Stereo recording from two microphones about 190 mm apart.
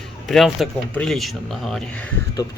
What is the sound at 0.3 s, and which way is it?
Speech, centre (ahead or behind).